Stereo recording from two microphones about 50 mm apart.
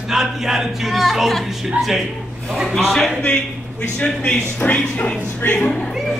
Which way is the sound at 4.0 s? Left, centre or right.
Left.